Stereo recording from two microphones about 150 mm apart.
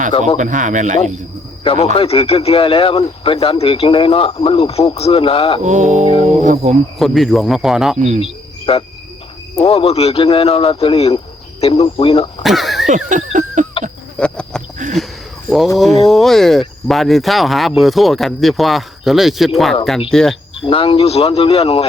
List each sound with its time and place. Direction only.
0.3 s speech: 55° right (ahead or behind)
1.6 s speech: 40° left (ahead or behind)
5.6 s a sound: 55° right (ahead or behind)
7.0 s speech: centre (ahead or behind)
7.9 s speech: 55° right (ahead or behind)
8.2 s cricket: 35° left (ahead or behind)
9.6 s speech: 40° left (ahead or behind)
12.4 s speech: centre (ahead or behind)
12.9 s a sound: 55° right (ahead or behind)
14.2 s insect: 5° left (ahead or behind)
15.8 s speech: centre (ahead or behind)
20.7 s speech: 35° left (ahead or behind)